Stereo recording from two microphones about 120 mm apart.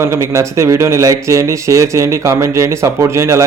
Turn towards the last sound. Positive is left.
turn(degrees=-25)  # may be behind; listen again after turning